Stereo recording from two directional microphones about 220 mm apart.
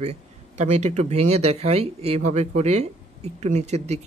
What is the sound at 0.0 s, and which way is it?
Speech, 30° right (ahead or behind).